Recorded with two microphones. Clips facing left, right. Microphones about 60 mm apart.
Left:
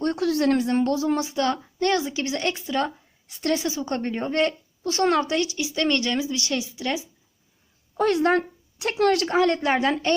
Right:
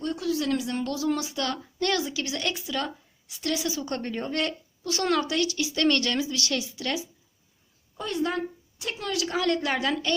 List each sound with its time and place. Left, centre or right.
0.0 s a woman's voice: left
7.9 s a woman's voice: left
9.2 s a woman's voice: left